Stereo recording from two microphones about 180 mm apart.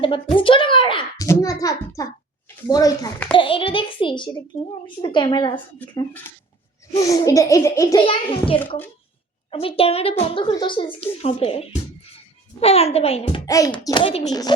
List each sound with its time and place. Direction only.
0.3 s a child's voice: 30° left (ahead or behind)
7.0 s a child's voice: 20° left (ahead or behind)
8.0 s a woman's voice: 30° left (ahead or behind)
13.4 s a child's voice: 20° left (ahead or behind)